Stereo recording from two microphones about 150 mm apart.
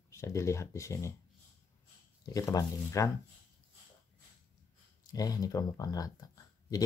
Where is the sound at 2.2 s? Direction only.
25° left (ahead or behind).